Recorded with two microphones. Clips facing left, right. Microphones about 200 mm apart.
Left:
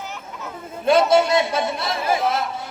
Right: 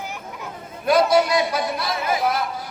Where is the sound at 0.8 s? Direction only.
25° left (ahead or behind).